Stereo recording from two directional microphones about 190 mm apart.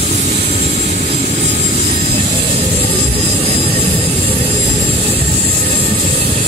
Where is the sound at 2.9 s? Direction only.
30° right (ahead or behind).